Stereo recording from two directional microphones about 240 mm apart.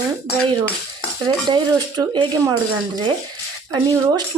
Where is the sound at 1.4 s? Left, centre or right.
Centre.